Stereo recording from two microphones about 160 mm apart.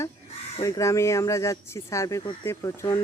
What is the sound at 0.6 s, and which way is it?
Speech, 20° left (ahead or behind).